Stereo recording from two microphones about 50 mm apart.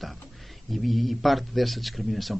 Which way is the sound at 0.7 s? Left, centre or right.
Centre.